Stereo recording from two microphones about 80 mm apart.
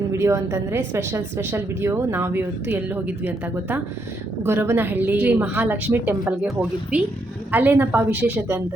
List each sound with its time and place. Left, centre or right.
0.1 s a woman's voice: right